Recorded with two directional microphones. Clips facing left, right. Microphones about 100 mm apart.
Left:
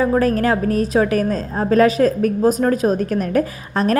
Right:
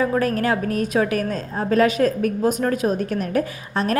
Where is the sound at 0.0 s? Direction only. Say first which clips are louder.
Left 4 dB; 35° left (ahead or behind).